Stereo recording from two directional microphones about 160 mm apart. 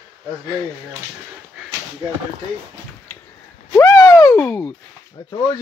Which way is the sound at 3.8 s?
20° left (ahead or behind).